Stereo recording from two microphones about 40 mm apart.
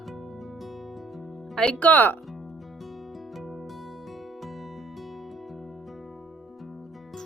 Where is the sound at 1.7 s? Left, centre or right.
Left.